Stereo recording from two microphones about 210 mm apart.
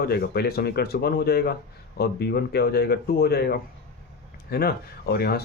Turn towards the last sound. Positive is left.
turn(degrees=50)  # may be behind; listen again after turning